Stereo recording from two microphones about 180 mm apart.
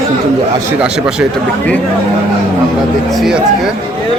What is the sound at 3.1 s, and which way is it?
Speech, centre (ahead or behind).